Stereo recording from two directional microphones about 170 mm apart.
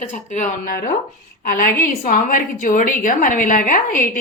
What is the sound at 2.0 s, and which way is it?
A woman's voice, 50° left (ahead or behind).